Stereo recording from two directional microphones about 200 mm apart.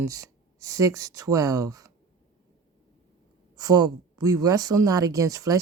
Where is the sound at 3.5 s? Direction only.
20° right (ahead or behind).